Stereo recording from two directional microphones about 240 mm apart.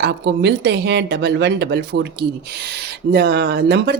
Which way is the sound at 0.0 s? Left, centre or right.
Right.